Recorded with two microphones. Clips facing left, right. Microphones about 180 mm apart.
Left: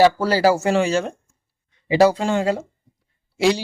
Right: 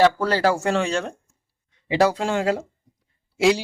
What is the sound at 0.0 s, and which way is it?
A man's voice, 5° left (ahead or behind).